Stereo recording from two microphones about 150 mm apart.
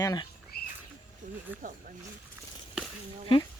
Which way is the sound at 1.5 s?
10° right (ahead or behind).